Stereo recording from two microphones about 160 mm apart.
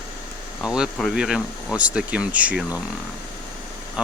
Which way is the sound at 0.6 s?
5° right (ahead or behind).